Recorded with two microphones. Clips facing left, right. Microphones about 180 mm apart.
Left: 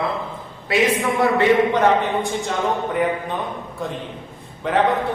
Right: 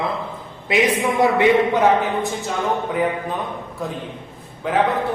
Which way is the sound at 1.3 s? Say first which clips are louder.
Even; 10° right (ahead or behind).